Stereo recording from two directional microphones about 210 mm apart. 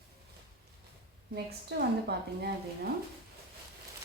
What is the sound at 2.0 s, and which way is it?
Speech, 50° right (ahead or behind).